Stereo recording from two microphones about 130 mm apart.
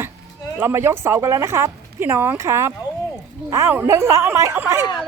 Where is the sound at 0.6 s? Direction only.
20° right (ahead or behind).